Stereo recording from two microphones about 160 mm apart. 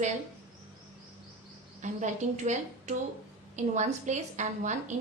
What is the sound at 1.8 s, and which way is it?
A woman's voice, 50° right (ahead or behind).